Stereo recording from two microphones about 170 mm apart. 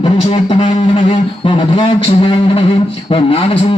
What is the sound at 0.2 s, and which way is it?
Speech, 35° left (ahead or behind).